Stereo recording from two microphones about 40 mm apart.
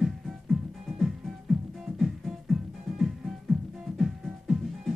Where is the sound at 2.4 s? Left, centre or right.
Centre.